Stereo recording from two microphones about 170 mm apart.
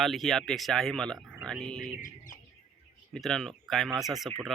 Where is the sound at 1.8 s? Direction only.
50° left (ahead or behind).